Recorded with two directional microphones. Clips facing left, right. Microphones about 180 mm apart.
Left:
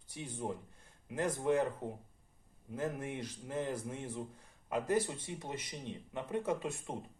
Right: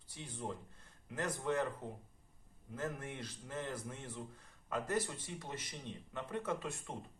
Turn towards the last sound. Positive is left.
turn(degrees=20)  # may be behind; listen again after turning